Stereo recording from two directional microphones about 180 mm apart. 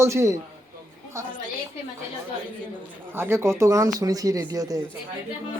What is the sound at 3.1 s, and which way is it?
Speech, 15° right (ahead or behind).